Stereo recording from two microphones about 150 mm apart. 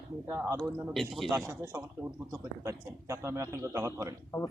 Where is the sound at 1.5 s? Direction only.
15° right (ahead or behind).